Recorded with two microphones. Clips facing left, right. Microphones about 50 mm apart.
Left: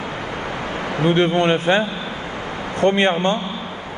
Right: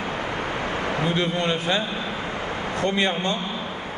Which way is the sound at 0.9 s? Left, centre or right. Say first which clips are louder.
Left 10 dB; left.